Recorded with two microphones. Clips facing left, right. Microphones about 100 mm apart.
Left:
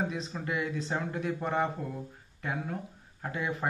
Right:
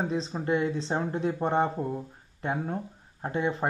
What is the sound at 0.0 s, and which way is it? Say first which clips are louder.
Speech: right 4 dB; 30° right (ahead or behind).